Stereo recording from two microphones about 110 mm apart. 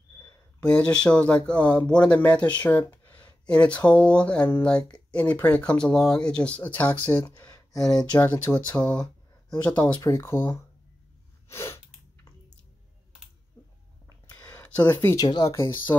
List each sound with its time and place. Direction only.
0.6 s speech: 10° left (ahead or behind)
7.7 s speech: 5° left (ahead or behind)
8.2 s speech: 20° left (ahead or behind)
9.9 s speech: 25° left (ahead or behind)
11.4 s sneeze: 25° left (ahead or behind)
14.0 s a sound: 30° left (ahead or behind)
14.5 s a sound: 15° left (ahead or behind)
15.1 s speech: 40° left (ahead or behind)
15.9 s speech: 30° left (ahead or behind)